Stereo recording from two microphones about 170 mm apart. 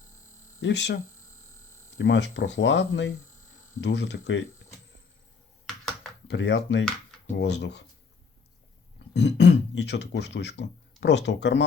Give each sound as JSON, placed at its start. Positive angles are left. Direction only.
{"t": 0.6, "sound": "speech", "side_deg": 90}
{"t": 5.6, "sound": "computer keyboard", "side_deg": 0}
{"t": 6.2, "sound": "speech", "side_deg": 90}
{"t": 9.1, "sound": "speech", "side_deg": 90}